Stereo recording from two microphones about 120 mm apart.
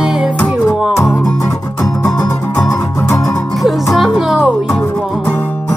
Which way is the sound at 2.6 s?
25° left (ahead or behind).